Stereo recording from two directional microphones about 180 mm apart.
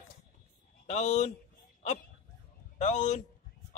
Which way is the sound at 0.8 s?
40° left (ahead or behind).